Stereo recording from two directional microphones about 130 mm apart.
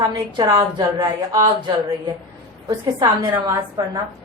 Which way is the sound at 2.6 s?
30° right (ahead or behind).